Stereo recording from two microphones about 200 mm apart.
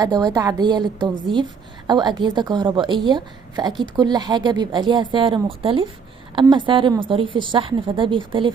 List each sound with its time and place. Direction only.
0.0 s a woman's voice: 20° right (ahead or behind)